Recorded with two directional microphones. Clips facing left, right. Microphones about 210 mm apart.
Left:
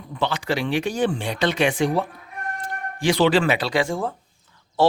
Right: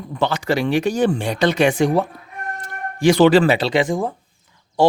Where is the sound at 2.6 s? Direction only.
45° right (ahead or behind).